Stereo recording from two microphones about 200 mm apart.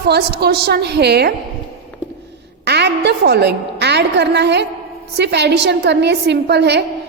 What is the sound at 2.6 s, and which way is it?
A woman's voice, 55° right (ahead or behind).